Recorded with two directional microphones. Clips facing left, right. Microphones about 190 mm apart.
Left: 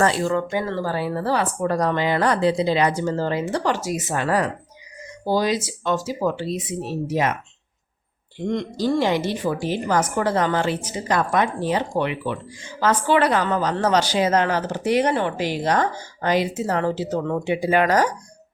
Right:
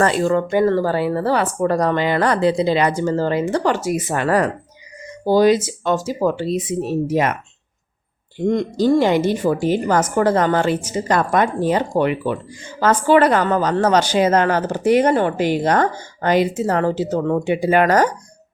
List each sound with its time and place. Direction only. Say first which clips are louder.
0.0 s a woman's voice: right 4 dB; 50° right (ahead or behind)
8.4 s a woman's voice: right 6 dB; 50° right (ahead or behind)